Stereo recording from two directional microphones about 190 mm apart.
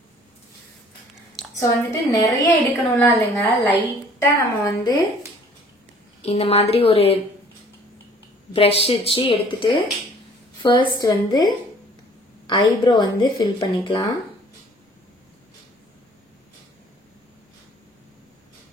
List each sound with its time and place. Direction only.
1.9 s a woman's voice: 15° left (ahead or behind)
6.2 s a woman's voice: 30° left (ahead or behind)
8.5 s a woman's voice: 30° left (ahead or behind)